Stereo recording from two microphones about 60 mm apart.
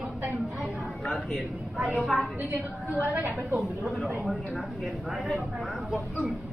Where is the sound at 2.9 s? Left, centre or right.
Right.